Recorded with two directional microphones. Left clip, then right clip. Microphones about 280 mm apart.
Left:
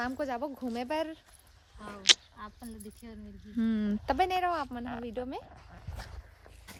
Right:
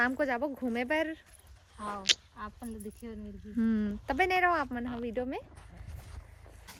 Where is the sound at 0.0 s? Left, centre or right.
Centre.